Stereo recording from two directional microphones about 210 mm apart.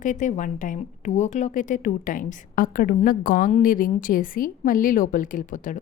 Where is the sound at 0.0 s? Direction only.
35° left (ahead or behind).